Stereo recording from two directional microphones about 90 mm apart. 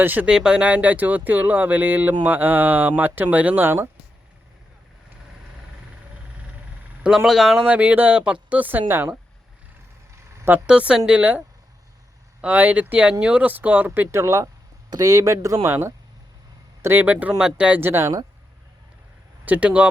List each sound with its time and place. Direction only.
0.0 s speech: 20° right (ahead or behind)
0.3 s speech: 10° right (ahead or behind); by 3.8 s 25° right (ahead or behind)
7.3 s speech: 5° right (ahead or behind); by 9.1 s 25° right (ahead or behind)
10.7 s speech: 10° right (ahead or behind)
17.7 s speech: 25° right (ahead or behind)
19.5 s speech: 15° right (ahead or behind)